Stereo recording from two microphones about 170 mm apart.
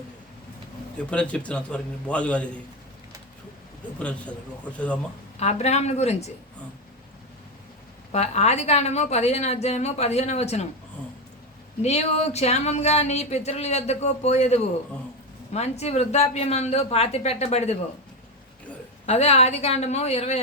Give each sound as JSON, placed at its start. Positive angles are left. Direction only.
{"t": 1.1, "sound": "a man's voice", "side_deg": 5}
{"t": 3.9, "sound": "a man's voice", "side_deg": 5}
{"t": 5.4, "sound": "speech", "side_deg": 40}
{"t": 8.1, "sound": "speech", "side_deg": 40}
{"t": 11.8, "sound": "speech", "side_deg": 40}
{"t": 19.0, "sound": "speech", "side_deg": 40}